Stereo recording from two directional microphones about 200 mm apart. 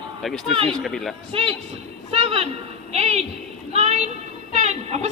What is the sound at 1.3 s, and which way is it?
Speech, 25° right (ahead or behind).